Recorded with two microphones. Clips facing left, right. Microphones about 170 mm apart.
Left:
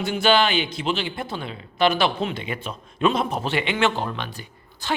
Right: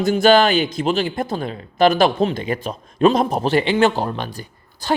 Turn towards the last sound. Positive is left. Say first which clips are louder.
# right 6 dB
turn(degrees=-40)  # may be behind; listen again after turning